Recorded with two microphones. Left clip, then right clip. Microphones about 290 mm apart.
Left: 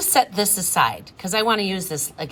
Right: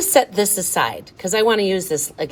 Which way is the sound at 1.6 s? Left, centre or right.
Left.